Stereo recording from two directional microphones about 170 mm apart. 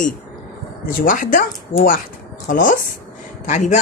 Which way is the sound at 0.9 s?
55° left (ahead or behind).